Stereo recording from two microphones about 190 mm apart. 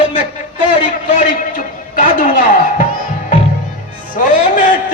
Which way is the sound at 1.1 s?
45° left (ahead or behind).